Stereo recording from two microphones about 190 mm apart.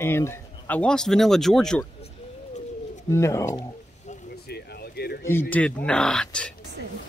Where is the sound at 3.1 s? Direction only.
15° left (ahead or behind).